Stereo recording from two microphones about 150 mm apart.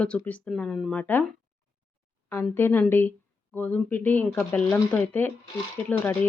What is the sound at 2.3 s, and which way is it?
A woman's voice, 15° left (ahead or behind).